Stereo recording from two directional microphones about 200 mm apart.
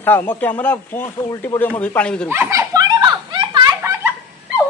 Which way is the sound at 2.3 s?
10° right (ahead or behind).